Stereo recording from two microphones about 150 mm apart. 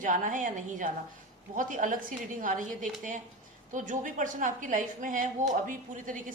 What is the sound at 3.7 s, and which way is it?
A woman's voice, 60° right (ahead or behind).